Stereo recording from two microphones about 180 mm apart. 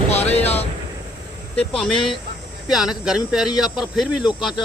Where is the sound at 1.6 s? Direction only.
5° left (ahead or behind).